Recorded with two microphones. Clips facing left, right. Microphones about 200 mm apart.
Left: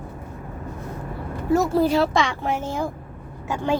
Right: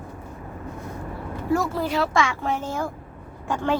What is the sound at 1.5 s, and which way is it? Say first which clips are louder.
Speech: left 5 dB; 25° left (ahead or behind).